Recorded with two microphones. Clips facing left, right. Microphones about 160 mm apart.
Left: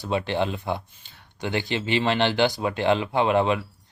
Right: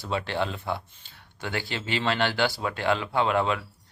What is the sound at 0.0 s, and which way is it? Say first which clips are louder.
Speech: left 4 dB; 20° left (ahead or behind).